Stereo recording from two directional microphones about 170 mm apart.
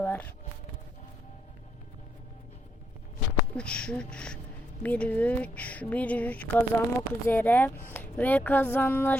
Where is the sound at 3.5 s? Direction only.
5° left (ahead or behind).